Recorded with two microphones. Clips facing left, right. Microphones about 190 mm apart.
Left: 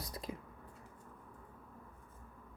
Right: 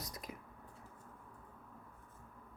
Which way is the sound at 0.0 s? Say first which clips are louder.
Left 4 dB; 30° left (ahead or behind).